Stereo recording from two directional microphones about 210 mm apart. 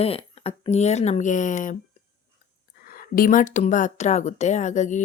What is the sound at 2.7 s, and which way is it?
Speech, 45° left (ahead or behind).